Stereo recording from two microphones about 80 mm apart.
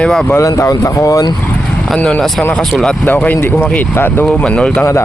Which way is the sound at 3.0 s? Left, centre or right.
Left.